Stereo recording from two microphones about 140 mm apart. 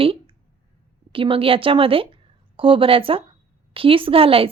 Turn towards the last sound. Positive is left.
turn(degrees=-40)  # may be behind; listen again after turning